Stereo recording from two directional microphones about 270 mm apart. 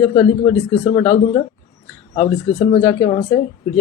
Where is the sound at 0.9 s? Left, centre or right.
Centre.